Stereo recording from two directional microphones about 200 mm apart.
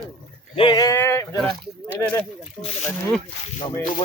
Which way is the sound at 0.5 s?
25° left (ahead or behind).